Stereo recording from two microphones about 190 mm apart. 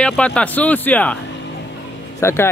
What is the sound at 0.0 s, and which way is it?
Speech, 5° left (ahead or behind).